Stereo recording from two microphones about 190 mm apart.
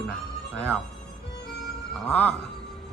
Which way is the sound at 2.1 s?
5° left (ahead or behind).